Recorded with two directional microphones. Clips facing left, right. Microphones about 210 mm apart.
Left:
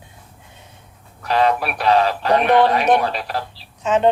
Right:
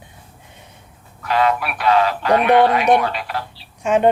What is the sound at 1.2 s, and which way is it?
Speech, 35° left (ahead or behind).